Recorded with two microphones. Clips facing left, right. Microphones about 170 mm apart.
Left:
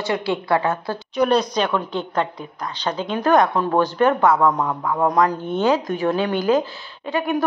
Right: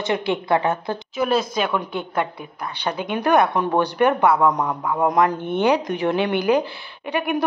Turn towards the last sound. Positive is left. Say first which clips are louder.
# left 1 dB
turn(degrees=-15)  # may be behind; listen again after turning